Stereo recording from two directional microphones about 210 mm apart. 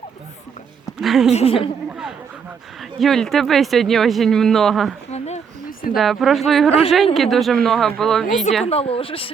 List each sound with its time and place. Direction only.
1.0 s a woman's voice: centre (ahead or behind)
1.3 s a woman's voice: 30° left (ahead or behind)
3.0 s speech: centre (ahead or behind)
5.1 s a sound: 30° left (ahead or behind)
5.9 s speech: centre (ahead or behind)
6.7 s a woman's voice: 25° left (ahead or behind)
7.1 s speech: centre (ahead or behind)
8.6 s a woman's voice: 30° left (ahead or behind)